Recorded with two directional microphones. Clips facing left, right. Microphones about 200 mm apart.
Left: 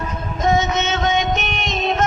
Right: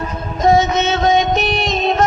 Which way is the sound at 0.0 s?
35° right (ahead or behind).